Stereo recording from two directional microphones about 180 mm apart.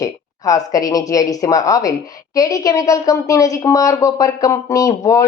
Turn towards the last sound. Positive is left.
turn(degrees=20)  # may be behind; listen again after turning